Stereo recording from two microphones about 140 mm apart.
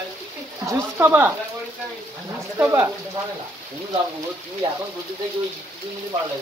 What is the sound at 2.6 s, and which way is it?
Speech, 20° right (ahead or behind).